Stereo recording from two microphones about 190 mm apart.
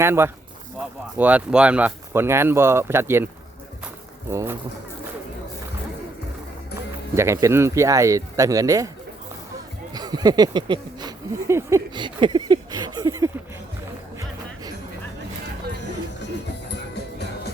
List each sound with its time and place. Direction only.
0.0 s speech: 15° right (ahead or behind)
4.3 s speech: 15° right (ahead or behind)
7.2 s speech: 15° right (ahead or behind)
9.9 s speech: 20° right (ahead or behind)
16.9 s music: 60° left (ahead or behind)